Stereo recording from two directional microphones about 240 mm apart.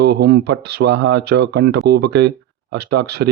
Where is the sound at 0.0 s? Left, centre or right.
Right.